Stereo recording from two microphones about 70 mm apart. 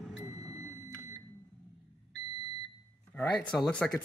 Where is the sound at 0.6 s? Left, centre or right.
Right.